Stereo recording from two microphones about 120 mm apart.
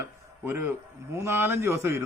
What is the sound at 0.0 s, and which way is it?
Speech, 20° right (ahead or behind).